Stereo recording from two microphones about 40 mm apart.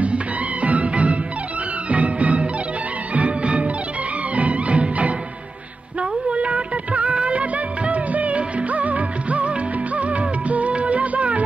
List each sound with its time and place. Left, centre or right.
0.0 s music: right
6.3 s music: right
9.9 s music of bollywood: right